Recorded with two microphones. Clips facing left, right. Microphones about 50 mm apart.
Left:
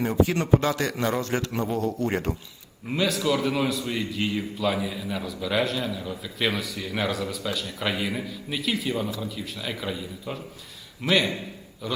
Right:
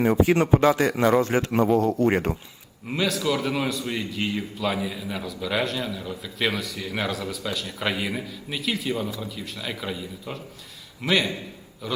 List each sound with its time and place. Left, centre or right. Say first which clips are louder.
0.0 s a man's voice: right 4 dB; right
1.8 s a man's voice: right 5 dB; right
2.0 s a man's voice: right 5 dB; right
2.9 s a man's voice: even; centre